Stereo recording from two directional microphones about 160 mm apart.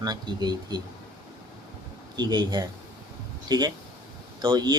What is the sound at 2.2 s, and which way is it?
Speech, 25° right (ahead or behind).